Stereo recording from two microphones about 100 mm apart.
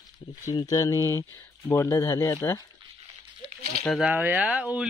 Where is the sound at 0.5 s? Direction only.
40° left (ahead or behind).